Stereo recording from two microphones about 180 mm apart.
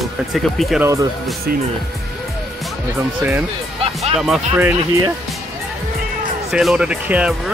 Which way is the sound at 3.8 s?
35° right (ahead or behind).